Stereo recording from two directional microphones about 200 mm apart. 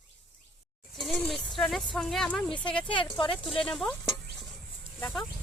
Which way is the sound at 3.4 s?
Centre (ahead or behind).